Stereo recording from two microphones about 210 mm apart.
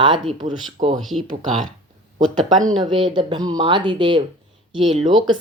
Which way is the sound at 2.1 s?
35° right (ahead or behind).